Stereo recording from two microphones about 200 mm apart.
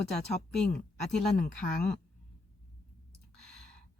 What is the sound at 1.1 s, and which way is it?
Speech, 5° left (ahead or behind).